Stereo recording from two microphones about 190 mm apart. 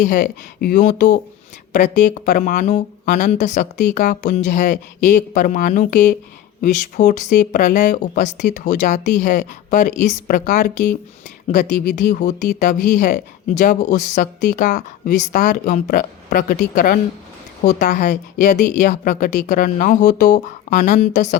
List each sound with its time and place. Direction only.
0.0 s speech: 45° left (ahead or behind)